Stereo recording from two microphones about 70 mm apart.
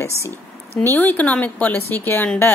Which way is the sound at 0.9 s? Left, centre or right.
Left.